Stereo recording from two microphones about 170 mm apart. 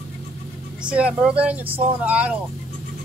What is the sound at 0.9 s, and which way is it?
Speech, 5° right (ahead or behind).